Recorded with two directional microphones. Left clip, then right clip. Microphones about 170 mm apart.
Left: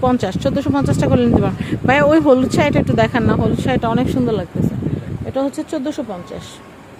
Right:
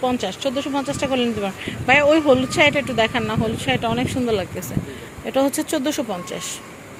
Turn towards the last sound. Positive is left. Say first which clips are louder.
# right 1 dB
turn(degrees=10)  # may be behind; listen again after turning